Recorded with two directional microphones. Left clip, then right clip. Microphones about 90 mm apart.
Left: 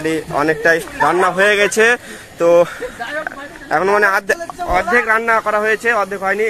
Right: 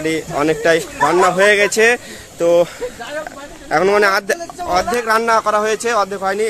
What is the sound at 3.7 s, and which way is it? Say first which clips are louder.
Speech: even; 20° right (ahead or behind).